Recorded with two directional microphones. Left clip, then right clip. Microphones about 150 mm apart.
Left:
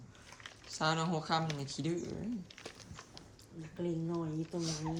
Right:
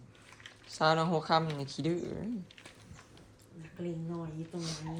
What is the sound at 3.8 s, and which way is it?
Speech, 90° left.